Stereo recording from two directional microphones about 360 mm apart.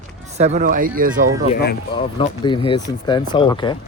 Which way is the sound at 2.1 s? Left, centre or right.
Centre.